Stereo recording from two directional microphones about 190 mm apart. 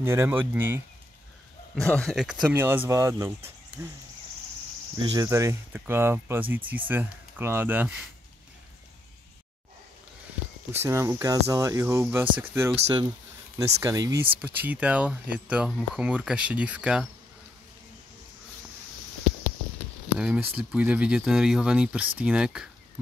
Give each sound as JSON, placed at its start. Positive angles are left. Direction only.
{"t": 0.0, "sound": "speech", "side_deg": -15}
{"t": 1.8, "sound": "speech", "side_deg": 5}
{"t": 2.4, "sound": "speech", "side_deg": -10}
{"t": 5.0, "sound": "speech", "side_deg": -20}
{"t": 10.8, "sound": "speech", "side_deg": -15}
{"t": 12.7, "sound": "speech", "side_deg": -25}
{"t": 14.4, "sound": "speech", "side_deg": -10}
{"t": 20.2, "sound": "speech", "side_deg": -5}